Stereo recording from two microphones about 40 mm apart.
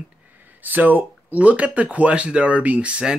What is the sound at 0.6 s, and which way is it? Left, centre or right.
Speech, right.